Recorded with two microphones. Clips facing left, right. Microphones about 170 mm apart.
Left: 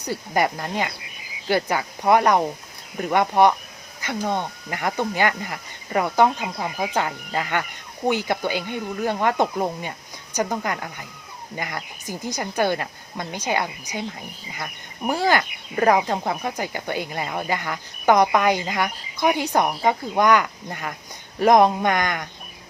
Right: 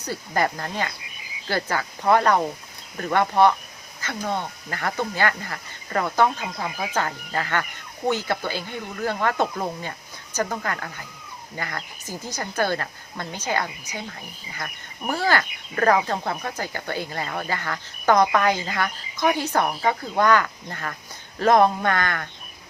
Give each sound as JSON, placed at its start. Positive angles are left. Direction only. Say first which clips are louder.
{"t": 0.0, "sound": "speech", "louder": "left 2 dB", "side_deg": 15}